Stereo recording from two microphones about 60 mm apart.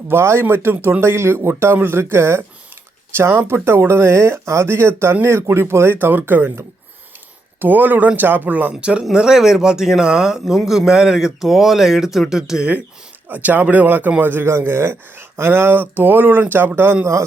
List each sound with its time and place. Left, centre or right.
0.1 s speech: right
7.6 s speech: right; by 12.6 s centre
13.2 s speech: right
14.4 s speech: right